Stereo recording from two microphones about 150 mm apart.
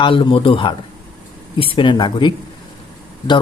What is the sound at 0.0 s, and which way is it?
Speech, 35° left (ahead or behind).